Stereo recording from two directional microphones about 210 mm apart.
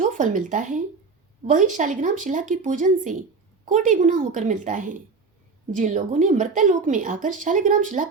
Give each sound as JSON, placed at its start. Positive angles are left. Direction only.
{"t": 0.0, "sound": "speech", "side_deg": -40}